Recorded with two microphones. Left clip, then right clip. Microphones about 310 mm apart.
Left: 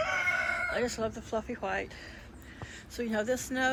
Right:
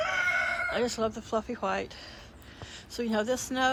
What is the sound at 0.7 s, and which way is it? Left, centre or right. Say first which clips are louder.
Speech: right 3 dB; centre.